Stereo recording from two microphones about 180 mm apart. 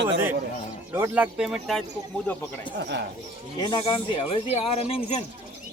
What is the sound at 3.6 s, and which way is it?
Speech, 25° left (ahead or behind).